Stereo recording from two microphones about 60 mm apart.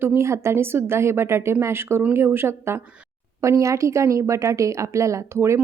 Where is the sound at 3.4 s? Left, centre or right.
Right.